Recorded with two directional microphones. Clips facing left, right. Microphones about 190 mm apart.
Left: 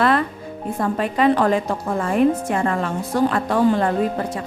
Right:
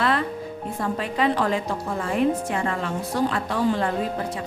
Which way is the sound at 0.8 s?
50° left (ahead or behind).